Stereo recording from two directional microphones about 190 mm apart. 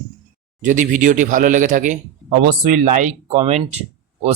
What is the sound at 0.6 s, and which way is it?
Speech, 40° right (ahead or behind).